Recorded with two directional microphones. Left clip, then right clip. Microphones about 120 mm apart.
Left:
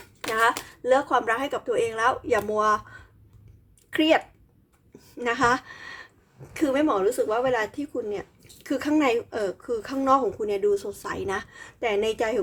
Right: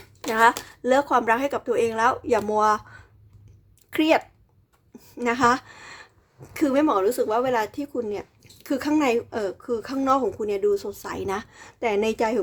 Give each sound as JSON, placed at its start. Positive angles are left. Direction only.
{"t": 0.3, "sound": "a woman's voice", "side_deg": -40}